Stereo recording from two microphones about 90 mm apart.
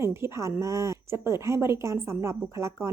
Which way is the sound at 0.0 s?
30° right (ahead or behind).